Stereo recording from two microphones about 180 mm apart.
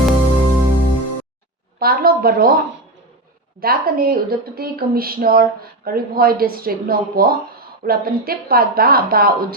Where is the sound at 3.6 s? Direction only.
55° right (ahead or behind).